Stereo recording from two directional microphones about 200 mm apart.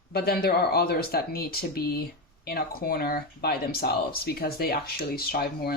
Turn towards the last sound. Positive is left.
turn(degrees=50)  # may be behind; listen again after turning